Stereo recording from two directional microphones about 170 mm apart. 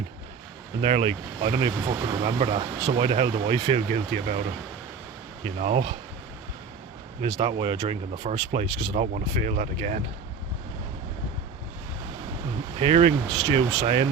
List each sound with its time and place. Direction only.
0.8 s speech: 35° right (ahead or behind)
7.2 s speech: 25° right (ahead or behind)
8.1 s speech: 40° right (ahead or behind)
12.8 s speech: 30° right (ahead or behind)